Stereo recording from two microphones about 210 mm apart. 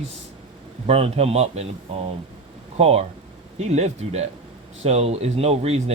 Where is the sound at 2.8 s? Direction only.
30° right (ahead or behind).